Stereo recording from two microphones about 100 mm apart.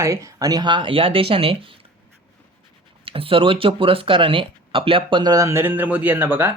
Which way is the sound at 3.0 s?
65° right (ahead or behind).